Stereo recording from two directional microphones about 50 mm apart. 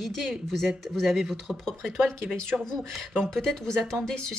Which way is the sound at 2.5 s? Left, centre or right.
Centre.